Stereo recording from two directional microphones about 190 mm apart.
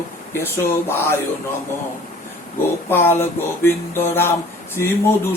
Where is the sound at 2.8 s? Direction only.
10° left (ahead or behind).